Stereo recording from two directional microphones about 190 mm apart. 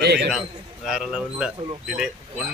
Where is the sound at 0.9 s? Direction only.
5° right (ahead or behind).